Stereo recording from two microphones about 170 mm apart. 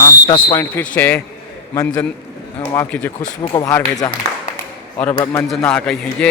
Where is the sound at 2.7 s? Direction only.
15° left (ahead or behind).